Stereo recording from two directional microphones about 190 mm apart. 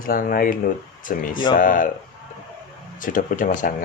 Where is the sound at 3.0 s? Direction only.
45° left (ahead or behind).